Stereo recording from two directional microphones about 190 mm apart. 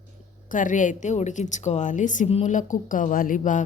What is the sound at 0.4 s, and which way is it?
A woman's voice, 45° left (ahead or behind).